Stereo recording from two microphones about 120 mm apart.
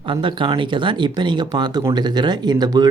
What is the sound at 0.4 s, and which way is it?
Speech, 45° right (ahead or behind).